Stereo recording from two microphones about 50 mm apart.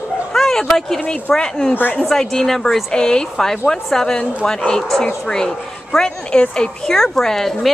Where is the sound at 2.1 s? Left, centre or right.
Centre.